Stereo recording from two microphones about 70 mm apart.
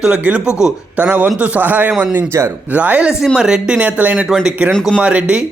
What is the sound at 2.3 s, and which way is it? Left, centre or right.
Speech, right.